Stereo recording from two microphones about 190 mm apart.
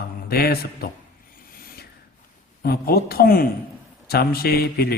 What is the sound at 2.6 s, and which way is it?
A man's voice, 55° left (ahead or behind).